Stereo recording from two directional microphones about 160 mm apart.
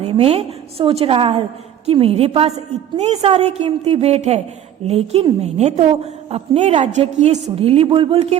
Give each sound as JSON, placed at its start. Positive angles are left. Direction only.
{"t": 0.0, "sound": "a woman's voice", "side_deg": -35}